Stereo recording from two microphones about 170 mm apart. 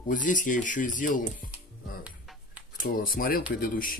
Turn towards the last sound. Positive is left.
turn(degrees=55)  # may be behind; listen again after turning